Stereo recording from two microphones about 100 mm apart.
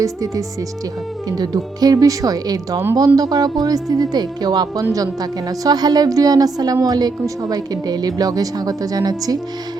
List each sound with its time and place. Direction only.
0.0 s speech: 35° right (ahead or behind)